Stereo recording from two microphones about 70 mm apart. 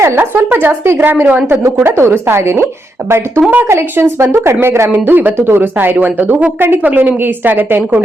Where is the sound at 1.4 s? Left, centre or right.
Right.